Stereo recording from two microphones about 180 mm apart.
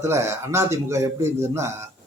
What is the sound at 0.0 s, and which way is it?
Speech, 15° right (ahead or behind).